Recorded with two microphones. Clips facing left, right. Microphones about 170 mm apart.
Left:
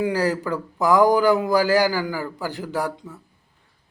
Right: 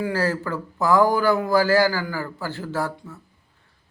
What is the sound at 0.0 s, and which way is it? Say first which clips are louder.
A man's voice: left 2 dB; 15° left (ahead or behind).